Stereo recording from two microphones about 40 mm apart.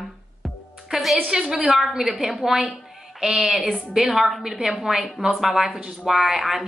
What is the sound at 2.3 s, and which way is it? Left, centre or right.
A woman's voice, centre.